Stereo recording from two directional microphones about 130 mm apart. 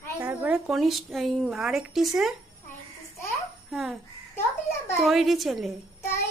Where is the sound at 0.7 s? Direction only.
Centre (ahead or behind).